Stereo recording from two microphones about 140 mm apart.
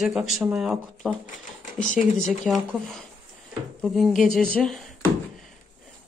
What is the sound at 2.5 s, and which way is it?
Speech, centre (ahead or behind).